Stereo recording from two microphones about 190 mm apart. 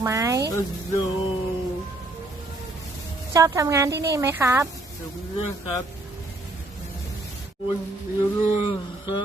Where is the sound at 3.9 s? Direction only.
60° right (ahead or behind).